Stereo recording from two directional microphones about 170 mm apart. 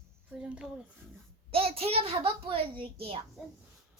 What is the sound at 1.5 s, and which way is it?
A child's voice, 35° right (ahead or behind).